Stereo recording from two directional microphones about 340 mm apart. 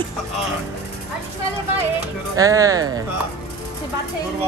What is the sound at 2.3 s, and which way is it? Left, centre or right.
Speech, centre.